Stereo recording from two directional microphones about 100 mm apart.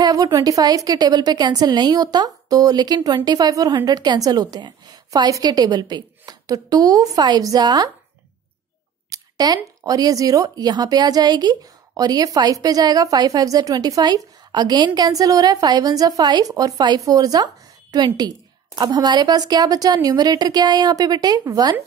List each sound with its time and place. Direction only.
0.0 s speech: 35° right (ahead or behind)
9.1 s a sound: 40° right (ahead or behind)
9.8 s a woman's voice: 40° right (ahead or behind)